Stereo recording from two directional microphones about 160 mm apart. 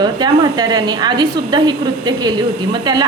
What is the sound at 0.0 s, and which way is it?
A woman's voice, 25° right (ahead or behind).